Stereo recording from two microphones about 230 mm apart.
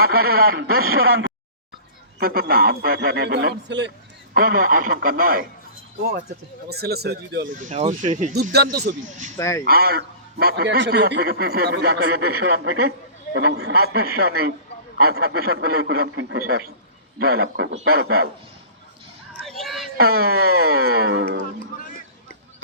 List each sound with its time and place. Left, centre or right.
0.0 s a man's voice: right
0.9 s speech: right
2.1 s a man's voice: right
4.4 s a man's voice: right
6.7 s a man's voice: right
7.5 s a man's voice: right
8.4 s a man's voice: right
9.4 s speech: centre
9.6 s a man's voice: right
19.5 s a sound: centre
20.0 s a man's voice: right